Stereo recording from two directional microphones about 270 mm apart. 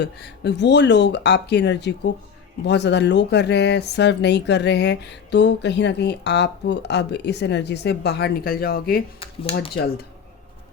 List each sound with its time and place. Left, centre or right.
0.0 s speech: left
9.2 s speech: centre
9.7 s speech: left